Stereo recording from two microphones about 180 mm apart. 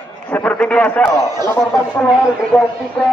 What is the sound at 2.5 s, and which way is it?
Speech, centre (ahead or behind).